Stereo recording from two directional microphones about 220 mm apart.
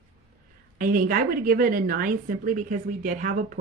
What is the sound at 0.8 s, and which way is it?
Speech, 40° right (ahead or behind).